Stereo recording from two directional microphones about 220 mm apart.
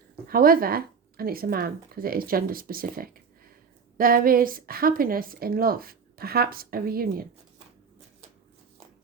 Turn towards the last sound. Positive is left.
turn(degrees=-40)  # may be behind; listen again after turning